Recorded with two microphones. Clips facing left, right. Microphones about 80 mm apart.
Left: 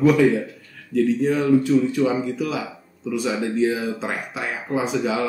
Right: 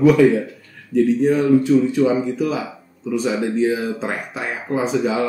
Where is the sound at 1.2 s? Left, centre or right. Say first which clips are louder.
Right 3 dB; centre.